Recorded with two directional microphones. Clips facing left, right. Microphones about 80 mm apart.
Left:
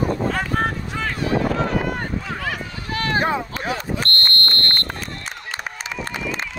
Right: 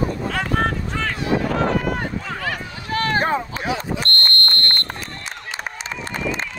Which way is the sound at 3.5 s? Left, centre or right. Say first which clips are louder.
Right 1 dB; left.